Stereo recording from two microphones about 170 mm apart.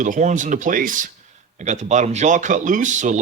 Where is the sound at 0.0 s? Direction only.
50° right (ahead or behind).